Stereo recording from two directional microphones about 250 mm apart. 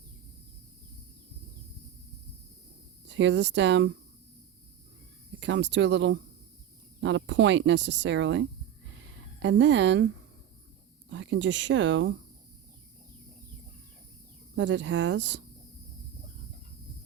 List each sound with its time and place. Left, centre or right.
3.1 s speech: right
5.4 s speech: right
11.1 s speech: right
14.5 s speech: right